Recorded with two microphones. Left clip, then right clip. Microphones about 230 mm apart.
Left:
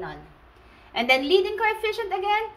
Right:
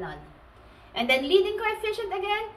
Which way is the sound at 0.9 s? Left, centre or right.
Left.